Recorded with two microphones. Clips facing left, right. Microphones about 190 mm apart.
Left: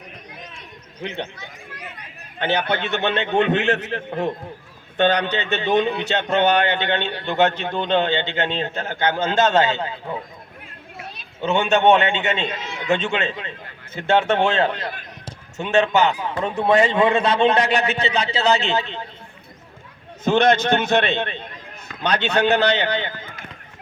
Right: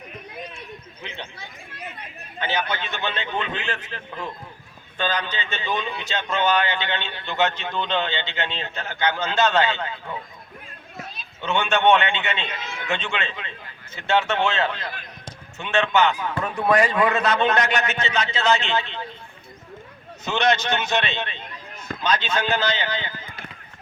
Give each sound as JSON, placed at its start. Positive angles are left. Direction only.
{"t": 1.0, "sound": "a man's voice", "side_deg": 55}
{"t": 2.4, "sound": "a man's voice", "side_deg": 60}
{"t": 11.3, "sound": "a man's voice", "side_deg": 40}
{"t": 16.3, "sound": "a man's voice", "side_deg": 25}
{"t": 20.2, "sound": "a man's voice", "side_deg": 50}